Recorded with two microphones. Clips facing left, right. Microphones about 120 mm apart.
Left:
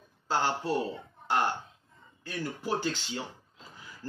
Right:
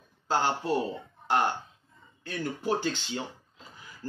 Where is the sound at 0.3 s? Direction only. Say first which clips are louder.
Right 2 dB; 15° right (ahead or behind).